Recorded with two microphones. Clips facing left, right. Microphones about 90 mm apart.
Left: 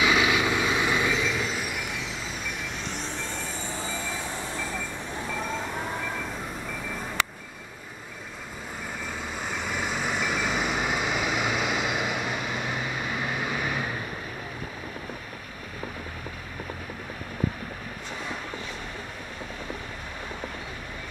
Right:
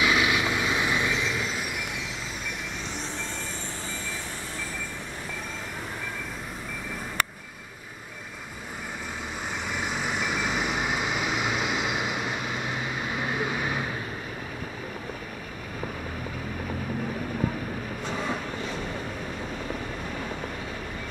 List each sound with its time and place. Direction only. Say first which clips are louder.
0.0 s vehicle: left 1 dB; centre (ahead or behind)
9.7 s vehicle: left 1 dB; 10° right (ahead or behind)